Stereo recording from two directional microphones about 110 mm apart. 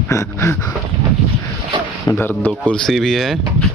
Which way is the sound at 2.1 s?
20° left (ahead or behind).